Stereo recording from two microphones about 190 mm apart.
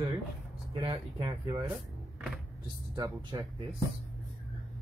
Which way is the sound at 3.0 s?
20° right (ahead or behind).